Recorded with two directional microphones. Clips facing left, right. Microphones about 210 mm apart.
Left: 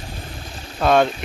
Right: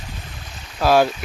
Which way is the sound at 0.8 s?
5° right (ahead or behind).